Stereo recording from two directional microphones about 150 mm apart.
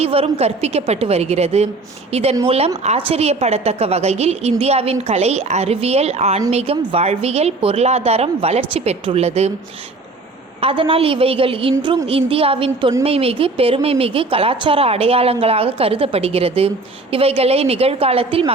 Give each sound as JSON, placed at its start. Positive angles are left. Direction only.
{"t": 0.0, "sound": "a woman's voice", "side_deg": -40}
{"t": 10.6, "sound": "speech", "side_deg": -35}